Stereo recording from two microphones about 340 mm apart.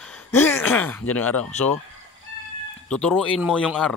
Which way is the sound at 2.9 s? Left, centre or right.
Centre.